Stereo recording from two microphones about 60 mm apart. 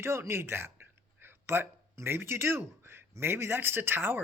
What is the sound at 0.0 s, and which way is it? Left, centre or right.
Speech, right.